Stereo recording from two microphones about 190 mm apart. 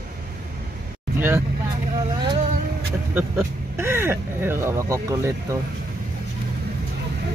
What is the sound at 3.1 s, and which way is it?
Speech, 15° right (ahead or behind).